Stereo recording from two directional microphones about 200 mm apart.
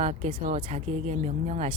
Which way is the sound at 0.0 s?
30° right (ahead or behind).